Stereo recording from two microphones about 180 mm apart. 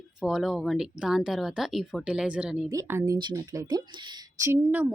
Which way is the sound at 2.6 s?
15° right (ahead or behind).